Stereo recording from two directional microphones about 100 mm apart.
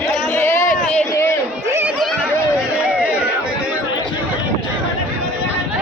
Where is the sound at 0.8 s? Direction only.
10° left (ahead or behind).